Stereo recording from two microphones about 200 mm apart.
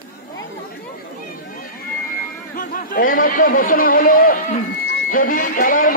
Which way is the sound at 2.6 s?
45° left (ahead or behind).